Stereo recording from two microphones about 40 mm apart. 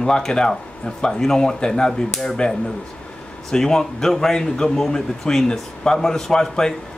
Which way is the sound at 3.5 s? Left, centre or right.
Centre.